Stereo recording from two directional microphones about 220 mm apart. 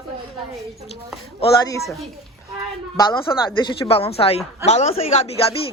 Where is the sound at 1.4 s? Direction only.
15° left (ahead or behind).